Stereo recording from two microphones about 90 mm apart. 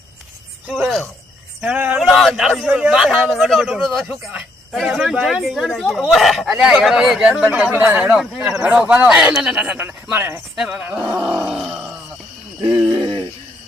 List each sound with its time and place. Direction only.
0.7 s speech: centre (ahead or behind)
1.6 s speech: 15° right (ahead or behind)
2.0 s a sound: centre (ahead or behind)
2.3 s speech: 5° right (ahead or behind)
4.1 s speech: 15° right (ahead or behind)
7.6 s speech: 15° right (ahead or behind)
9.7 s speech: 20° right (ahead or behind)
10.6 s speech: 15° right (ahead or behind)
10.9 s groan: 10° right (ahead or behind)
12.6 s groan: 60° right (ahead or behind)